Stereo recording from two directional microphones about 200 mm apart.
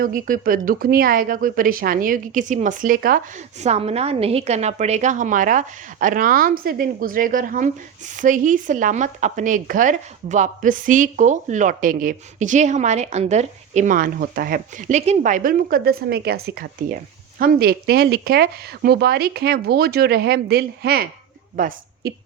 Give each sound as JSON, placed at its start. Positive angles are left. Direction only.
{"t": 0.0, "sound": "a woman's voice", "side_deg": -45}